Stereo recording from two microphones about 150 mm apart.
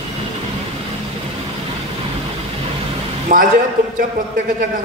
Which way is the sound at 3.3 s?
65° right (ahead or behind).